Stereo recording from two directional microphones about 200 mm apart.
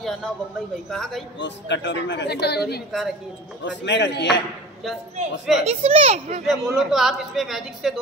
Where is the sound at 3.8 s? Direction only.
60° left (ahead or behind).